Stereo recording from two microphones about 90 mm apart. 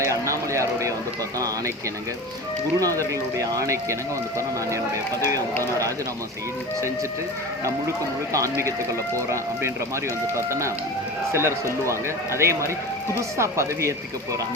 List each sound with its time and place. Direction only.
0.0 s a sound: 35° right (ahead or behind)
2.7 s speech: 40° right (ahead or behind)
8.3 s speech: 35° right (ahead or behind)